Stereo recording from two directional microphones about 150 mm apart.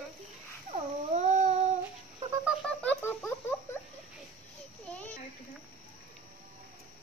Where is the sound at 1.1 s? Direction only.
50° right (ahead or behind).